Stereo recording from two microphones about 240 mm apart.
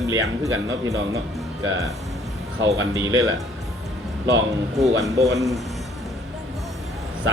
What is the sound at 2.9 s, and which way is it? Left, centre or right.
Speech, centre.